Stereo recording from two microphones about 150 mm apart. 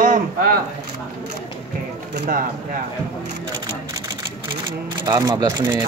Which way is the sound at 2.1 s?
80° right.